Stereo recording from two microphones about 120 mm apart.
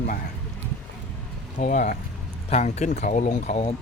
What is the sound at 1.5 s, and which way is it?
Speech, 90° left.